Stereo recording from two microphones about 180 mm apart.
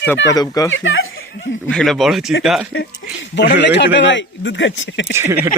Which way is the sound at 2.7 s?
80° left.